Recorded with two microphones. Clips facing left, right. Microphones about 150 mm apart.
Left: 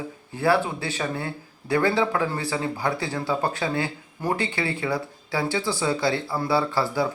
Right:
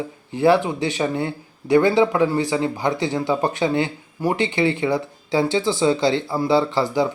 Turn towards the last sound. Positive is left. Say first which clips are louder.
# right 4 dB
turn(degrees=-20)  # may be behind; listen again after turning